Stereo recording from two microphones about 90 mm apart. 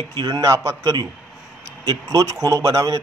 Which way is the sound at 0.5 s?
35° right (ahead or behind).